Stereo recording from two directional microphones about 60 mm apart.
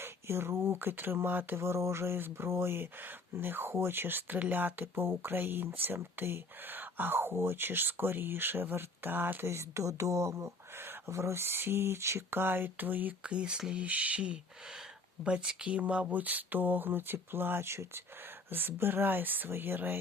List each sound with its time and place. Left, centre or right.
0.0 s speech: right
1.6 s speech: right
13.2 s speech: centre; by 20.0 s right